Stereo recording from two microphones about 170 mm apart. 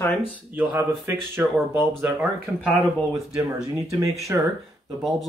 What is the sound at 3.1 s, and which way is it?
Speech, 20° right (ahead or behind).